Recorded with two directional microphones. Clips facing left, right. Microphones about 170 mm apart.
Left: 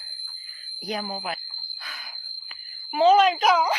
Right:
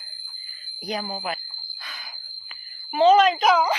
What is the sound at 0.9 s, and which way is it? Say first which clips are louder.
Speech: right 1 dB; centre (ahead or behind).